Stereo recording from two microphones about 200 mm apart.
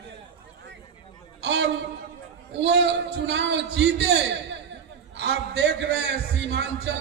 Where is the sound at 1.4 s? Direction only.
65° right (ahead or behind).